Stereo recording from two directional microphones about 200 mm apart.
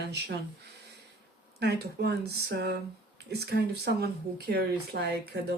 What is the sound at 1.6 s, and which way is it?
Speech, 55° right (ahead or behind).